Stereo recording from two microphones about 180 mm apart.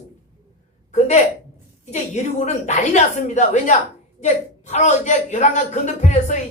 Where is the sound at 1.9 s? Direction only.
40° left (ahead or behind).